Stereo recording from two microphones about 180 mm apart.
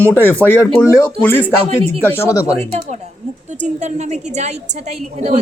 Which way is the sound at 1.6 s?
30° right (ahead or behind).